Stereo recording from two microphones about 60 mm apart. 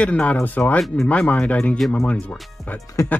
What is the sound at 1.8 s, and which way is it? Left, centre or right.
Speech, centre.